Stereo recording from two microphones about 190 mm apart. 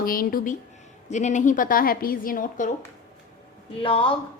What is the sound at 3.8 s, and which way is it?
Speech, 30° left (ahead or behind).